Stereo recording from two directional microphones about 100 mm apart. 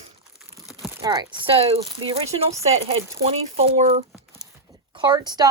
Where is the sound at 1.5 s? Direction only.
80° right.